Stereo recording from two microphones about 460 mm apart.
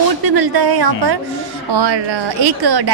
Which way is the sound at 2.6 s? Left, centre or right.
Right.